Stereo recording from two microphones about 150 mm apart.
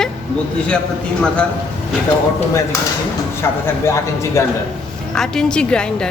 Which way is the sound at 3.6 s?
20° left (ahead or behind).